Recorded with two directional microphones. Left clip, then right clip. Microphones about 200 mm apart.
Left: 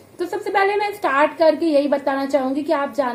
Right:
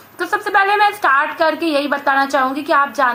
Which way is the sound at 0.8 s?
10° left (ahead or behind).